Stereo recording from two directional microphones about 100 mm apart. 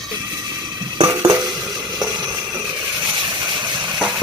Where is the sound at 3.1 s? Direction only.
55° right (ahead or behind).